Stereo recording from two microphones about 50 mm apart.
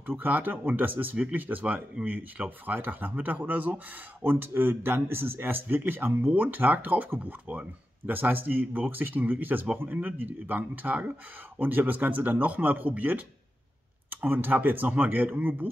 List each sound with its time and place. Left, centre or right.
0.2 s speech: right
14.2 s speech: right